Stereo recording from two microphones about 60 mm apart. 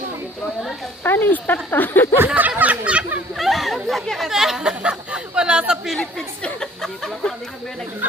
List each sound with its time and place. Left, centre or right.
1.0 s speech: left
2.1 s speech: right
3.3 s chatter: centre
3.8 s speech: centre
4.7 s a sound: centre
6.0 s chatter: centre